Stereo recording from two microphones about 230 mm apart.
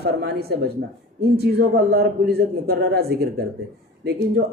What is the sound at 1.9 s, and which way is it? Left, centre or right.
A man's voice, right.